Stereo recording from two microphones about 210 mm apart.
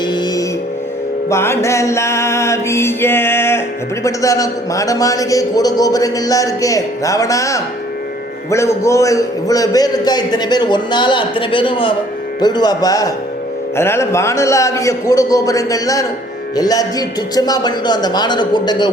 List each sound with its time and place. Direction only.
0.0 s music: 20° left (ahead or behind)
1.3 s a man's voice: 10° left (ahead or behind)